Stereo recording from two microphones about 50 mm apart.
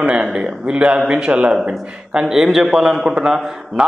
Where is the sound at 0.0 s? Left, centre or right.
Right.